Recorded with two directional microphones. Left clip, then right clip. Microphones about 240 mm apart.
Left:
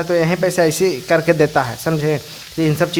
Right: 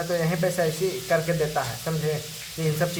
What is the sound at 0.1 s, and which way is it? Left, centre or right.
Speech, left.